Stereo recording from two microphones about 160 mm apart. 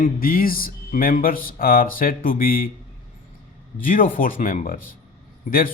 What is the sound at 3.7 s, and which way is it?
A man's voice, 60° left (ahead or behind).